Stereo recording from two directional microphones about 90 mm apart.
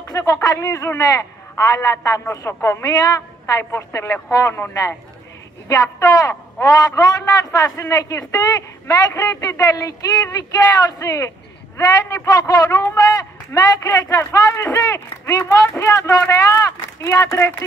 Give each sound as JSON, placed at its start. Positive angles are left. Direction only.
{"t": 0.1, "sound": "a man's voice", "side_deg": 40}
{"t": 2.9, "sound": "a woman's voice", "side_deg": 45}
{"t": 5.7, "sound": "a man's voice", "side_deg": 40}